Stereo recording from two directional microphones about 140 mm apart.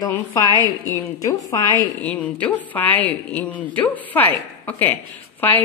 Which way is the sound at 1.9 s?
10° left (ahead or behind).